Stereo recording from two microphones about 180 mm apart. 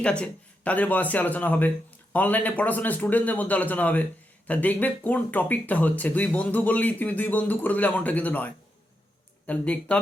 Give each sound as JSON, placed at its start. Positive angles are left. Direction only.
{"t": 0.0, "sound": "speech", "side_deg": 5}